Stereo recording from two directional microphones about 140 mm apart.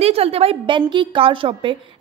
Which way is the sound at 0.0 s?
45° right (ahead or behind).